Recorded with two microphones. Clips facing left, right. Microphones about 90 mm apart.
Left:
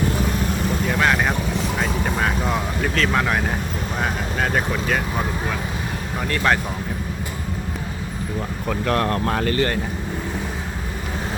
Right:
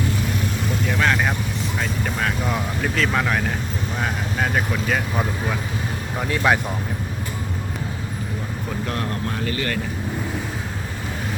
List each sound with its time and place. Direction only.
0.9 s vehicle: 5° left (ahead or behind)
2.9 s speech: centre (ahead or behind)
6.2 s speech: 10° right (ahead or behind)
8.9 s speech: 70° left (ahead or behind); by 9.6 s 50° left (ahead or behind)